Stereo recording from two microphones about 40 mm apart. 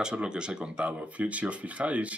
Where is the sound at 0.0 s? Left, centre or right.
Right.